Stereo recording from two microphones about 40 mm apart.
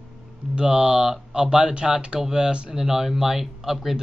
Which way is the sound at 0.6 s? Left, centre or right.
Right.